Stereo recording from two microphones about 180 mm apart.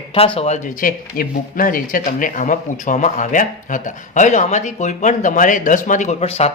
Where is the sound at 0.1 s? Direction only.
30° left (ahead or behind).